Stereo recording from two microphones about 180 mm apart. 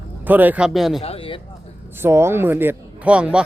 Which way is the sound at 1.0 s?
30° left (ahead or behind).